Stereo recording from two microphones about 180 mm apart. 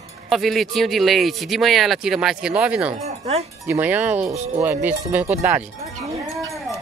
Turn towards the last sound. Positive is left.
turn(degrees=0)  # may be behind; listen again after turning